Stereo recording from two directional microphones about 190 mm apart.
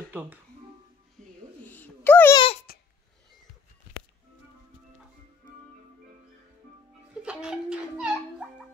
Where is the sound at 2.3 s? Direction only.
30° left (ahead or behind).